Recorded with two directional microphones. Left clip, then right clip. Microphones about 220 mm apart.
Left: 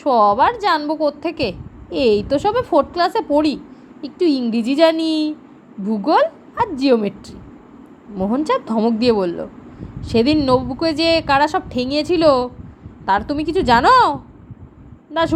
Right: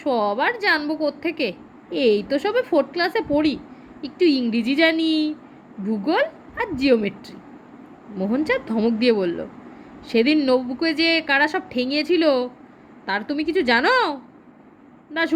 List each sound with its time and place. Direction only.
0.0 s a woman's voice: 20° left (ahead or behind)